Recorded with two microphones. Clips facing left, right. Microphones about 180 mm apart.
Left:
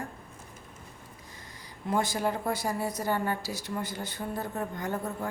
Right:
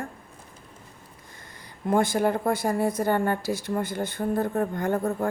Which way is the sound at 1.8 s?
55° right (ahead or behind).